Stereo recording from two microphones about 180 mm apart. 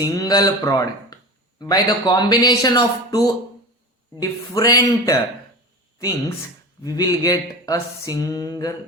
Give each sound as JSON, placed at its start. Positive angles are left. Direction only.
{"t": 0.0, "sound": "speech", "side_deg": 20}
{"t": 4.2, "sound": "speech", "side_deg": 20}